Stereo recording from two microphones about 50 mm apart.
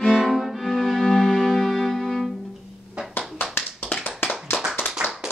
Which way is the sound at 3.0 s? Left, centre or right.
Centre.